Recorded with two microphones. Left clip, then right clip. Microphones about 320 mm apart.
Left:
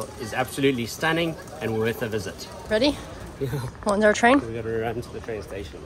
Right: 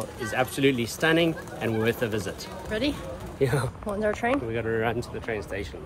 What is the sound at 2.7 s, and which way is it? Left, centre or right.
Speech, centre.